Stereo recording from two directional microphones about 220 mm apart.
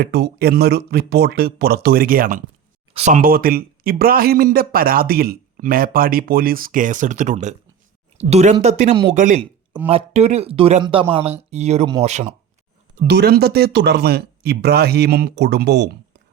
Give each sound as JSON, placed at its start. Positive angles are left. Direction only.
{"t": 0.0, "sound": "speech", "side_deg": -45}
{"t": 13.0, "sound": "speech", "side_deg": -45}